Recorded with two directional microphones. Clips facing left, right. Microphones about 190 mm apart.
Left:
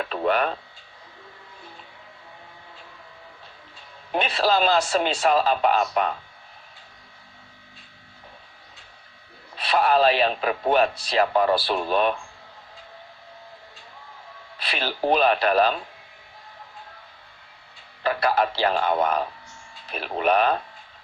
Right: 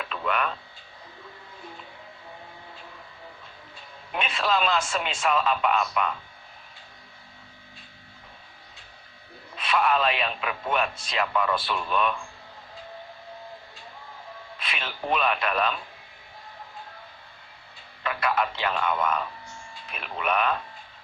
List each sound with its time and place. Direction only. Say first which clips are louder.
0.0 s speech: left 6 dB; 35° left (ahead or behind)
4.1 s speech: left 5 dB; 35° left (ahead or behind)
9.6 s speech: left 4 dB; 35° left (ahead or behind)
14.6 s speech: left 8 dB; 35° left (ahead or behind)
18.0 s speech: left 5 dB; 35° left (ahead or behind)